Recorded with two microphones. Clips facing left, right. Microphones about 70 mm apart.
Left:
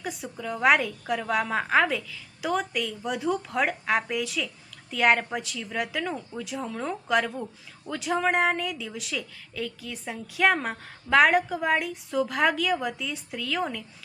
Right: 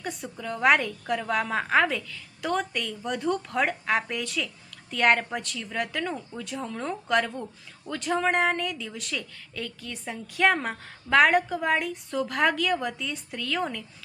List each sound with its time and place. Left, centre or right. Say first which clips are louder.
0.0 s a woman's voice: left 1 dB; centre